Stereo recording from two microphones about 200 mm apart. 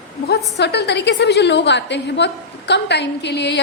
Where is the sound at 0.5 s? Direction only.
55° left (ahead or behind).